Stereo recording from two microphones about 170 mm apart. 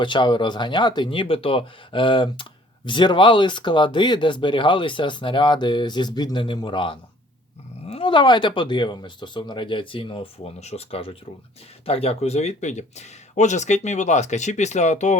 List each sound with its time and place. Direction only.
0.0 s speech: 25° left (ahead or behind); by 15.2 s 45° left (ahead or behind)